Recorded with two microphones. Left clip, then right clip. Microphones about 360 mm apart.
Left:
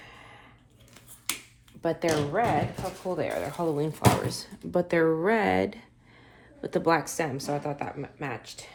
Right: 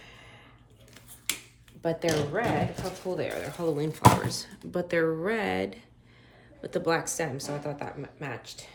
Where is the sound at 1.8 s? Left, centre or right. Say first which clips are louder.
Left 1 dB; centre.